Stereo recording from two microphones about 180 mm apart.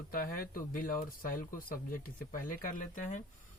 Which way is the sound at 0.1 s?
50° left (ahead or behind).